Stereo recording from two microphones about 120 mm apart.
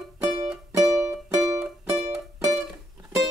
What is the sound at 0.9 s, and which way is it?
Music, 25° right (ahead or behind).